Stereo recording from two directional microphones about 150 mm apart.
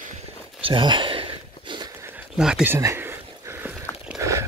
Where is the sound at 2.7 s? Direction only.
15° right (ahead or behind).